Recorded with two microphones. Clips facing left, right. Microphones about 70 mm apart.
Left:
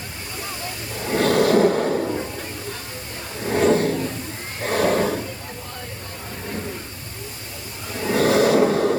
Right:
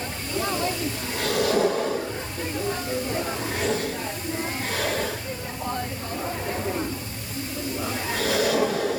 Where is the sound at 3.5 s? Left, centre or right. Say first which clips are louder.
Left 13 dB; left.